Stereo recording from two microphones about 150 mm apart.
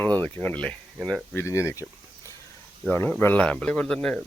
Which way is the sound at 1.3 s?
20° left (ahead or behind).